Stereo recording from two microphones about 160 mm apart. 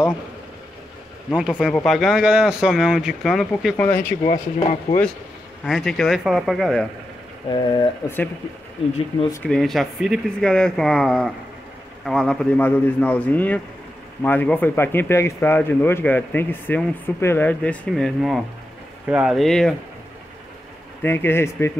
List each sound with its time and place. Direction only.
1.3 s speech: 5° right (ahead or behind)
3.8 s speech: 15° left (ahead or behind)
4.2 s speech: 40° left (ahead or behind)
5.7 s speech: centre (ahead or behind)
7.5 s speech: 30° left (ahead or behind)
9.3 s speech: 5° left (ahead or behind)
21.0 s speech: 15° left (ahead or behind)